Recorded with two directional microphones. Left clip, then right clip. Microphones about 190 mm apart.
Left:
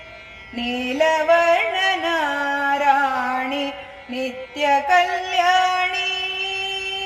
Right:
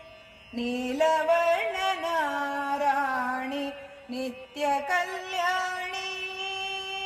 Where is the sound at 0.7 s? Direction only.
40° right (ahead or behind).